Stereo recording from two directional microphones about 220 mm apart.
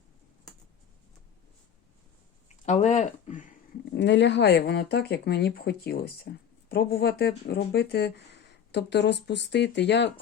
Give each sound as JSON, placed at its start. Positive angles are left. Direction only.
{"t": 2.6, "sound": "speech", "side_deg": 35}
{"t": 3.9, "sound": "speech", "side_deg": 50}